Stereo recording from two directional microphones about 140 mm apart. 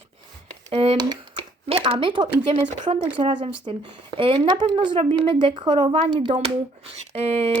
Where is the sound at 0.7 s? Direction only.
45° right (ahead or behind).